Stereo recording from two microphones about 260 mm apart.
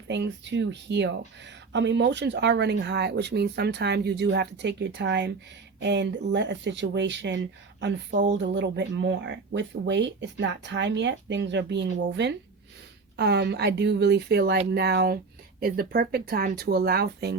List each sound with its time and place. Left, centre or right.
0.1 s speech: right